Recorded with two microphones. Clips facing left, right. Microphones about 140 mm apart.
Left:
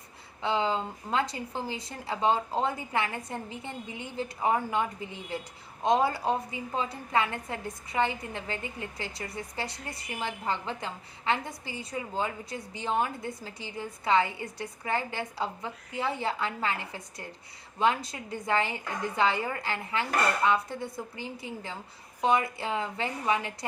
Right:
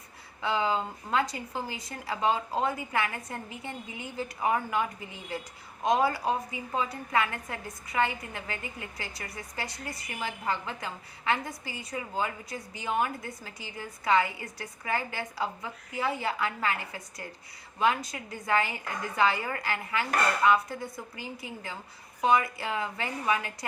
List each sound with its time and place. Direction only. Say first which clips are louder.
0.4 s a woman's voice: even; 25° left (ahead or behind)